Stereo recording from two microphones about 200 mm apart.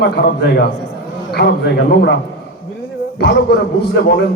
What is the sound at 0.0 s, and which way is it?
A man's voice, 55° left (ahead or behind).